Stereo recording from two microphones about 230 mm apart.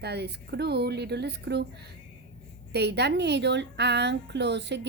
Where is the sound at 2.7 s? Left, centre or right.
Right.